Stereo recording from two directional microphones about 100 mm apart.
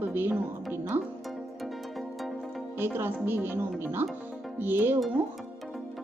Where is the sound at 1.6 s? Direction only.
Centre (ahead or behind).